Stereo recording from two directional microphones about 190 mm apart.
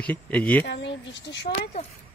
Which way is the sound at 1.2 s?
65° left (ahead or behind).